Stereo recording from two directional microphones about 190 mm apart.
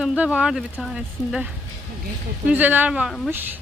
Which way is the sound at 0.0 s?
5° right (ahead or behind).